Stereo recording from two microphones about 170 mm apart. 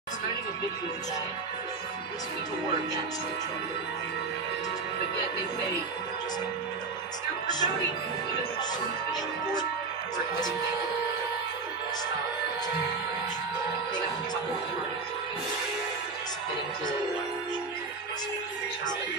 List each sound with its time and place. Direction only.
7.4 s speech: 25° left (ahead or behind)